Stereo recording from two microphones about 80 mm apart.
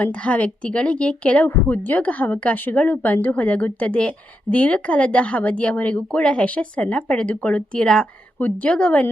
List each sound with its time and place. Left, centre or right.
0.0 s a woman's voice: centre